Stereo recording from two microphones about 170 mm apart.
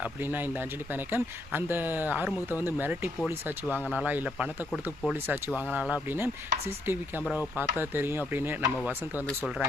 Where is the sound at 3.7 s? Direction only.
10° left (ahead or behind).